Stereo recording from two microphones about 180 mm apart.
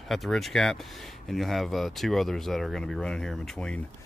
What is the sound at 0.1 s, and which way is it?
Speech, centre (ahead or behind).